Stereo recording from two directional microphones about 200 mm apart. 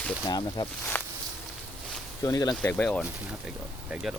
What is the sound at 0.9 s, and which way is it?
Walk, 10° left (ahead or behind).